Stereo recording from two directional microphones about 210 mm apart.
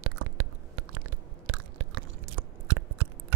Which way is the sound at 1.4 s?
70° right (ahead or behind).